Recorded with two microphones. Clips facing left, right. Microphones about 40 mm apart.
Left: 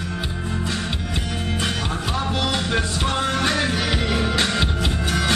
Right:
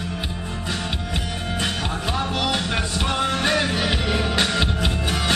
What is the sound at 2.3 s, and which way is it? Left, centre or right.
Music, centre.